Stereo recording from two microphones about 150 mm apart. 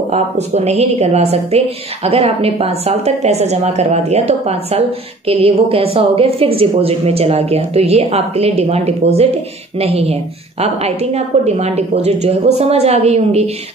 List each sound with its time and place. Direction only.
0.1 s a woman's voice: 45° right (ahead or behind)